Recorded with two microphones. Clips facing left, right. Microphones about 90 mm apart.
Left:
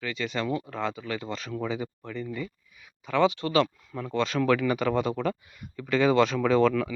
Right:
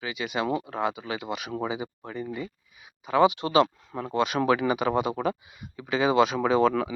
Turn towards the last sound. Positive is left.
turn(degrees=-10)  # may be behind; listen again after turning